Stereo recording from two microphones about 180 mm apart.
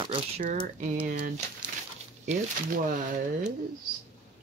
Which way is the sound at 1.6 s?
5° right (ahead or behind).